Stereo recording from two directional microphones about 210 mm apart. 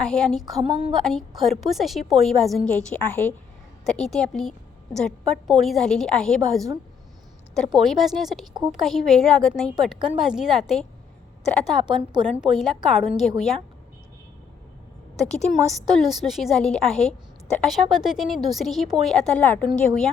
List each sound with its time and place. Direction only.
0.0 s a woman's voice: 5° left (ahead or behind)
0.4 s speech: 20° right (ahead or behind)
0.9 s a woman's voice: centre (ahead or behind)
12.2 s a woman's voice: centre (ahead or behind)
15.2 s a woman's voice: centre (ahead or behind)